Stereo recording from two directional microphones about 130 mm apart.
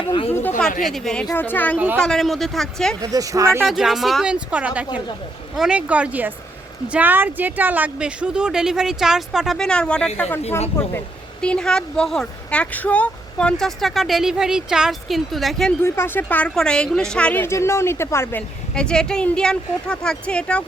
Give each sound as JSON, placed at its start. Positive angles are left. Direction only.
{"t": 0.0, "sound": "speech", "side_deg": 45}
{"t": 0.8, "sound": "speech", "side_deg": 0}
{"t": 1.3, "sound": "speech", "side_deg": 15}
{"t": 3.0, "sound": "speech", "side_deg": -30}
{"t": 3.6, "sound": "speech", "side_deg": 0}
{"t": 15.8, "sound": "speech", "side_deg": 20}
{"t": 18.7, "sound": "speech", "side_deg": 5}